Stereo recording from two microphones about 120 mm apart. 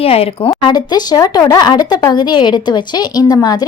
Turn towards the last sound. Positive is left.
turn(degrees=35)  # may be behind; listen again after turning